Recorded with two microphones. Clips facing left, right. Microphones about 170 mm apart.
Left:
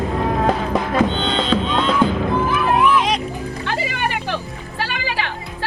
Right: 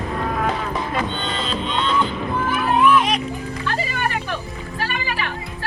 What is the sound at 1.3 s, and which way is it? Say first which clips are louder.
Music: left 6 dB; 90° left.